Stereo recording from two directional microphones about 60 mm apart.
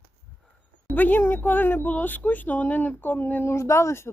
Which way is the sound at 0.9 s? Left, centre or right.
Left.